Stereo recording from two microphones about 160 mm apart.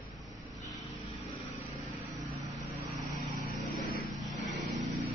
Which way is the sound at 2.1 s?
Centre (ahead or behind).